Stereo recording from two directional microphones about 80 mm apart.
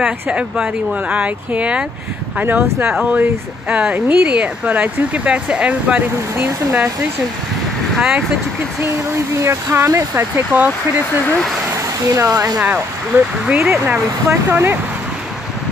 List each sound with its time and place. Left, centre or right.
0.0 s speech: centre
7.9 s speech: centre
9.1 s speech: right
11.7 s a sound: right
12.3 s speech: right
12.6 s speech: centre